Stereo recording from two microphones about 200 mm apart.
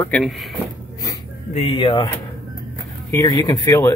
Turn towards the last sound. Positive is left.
turn(degrees=15)  # may be behind; listen again after turning